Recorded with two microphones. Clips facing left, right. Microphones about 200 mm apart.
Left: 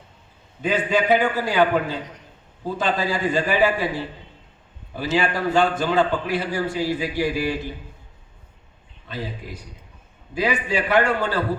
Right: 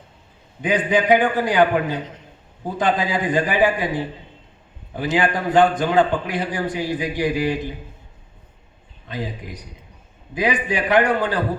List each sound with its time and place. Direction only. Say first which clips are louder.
0.6 s a man's voice: right 2 dB; 15° right (ahead or behind)
9.0 s a man's voice: right 2 dB; 15° right (ahead or behind)